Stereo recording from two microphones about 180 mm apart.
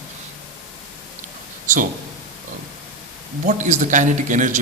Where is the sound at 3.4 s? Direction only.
45° right (ahead or behind).